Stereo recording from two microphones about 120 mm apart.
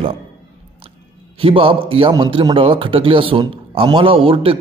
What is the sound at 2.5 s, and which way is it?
A man's voice, 50° right (ahead or behind).